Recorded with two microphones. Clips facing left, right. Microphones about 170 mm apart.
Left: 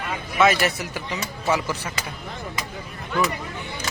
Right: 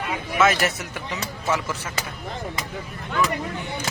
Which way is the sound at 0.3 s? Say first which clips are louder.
Left 1 dB; centre (ahead or behind).